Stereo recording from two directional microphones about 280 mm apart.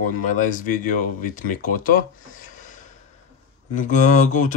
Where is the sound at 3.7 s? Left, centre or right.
Left.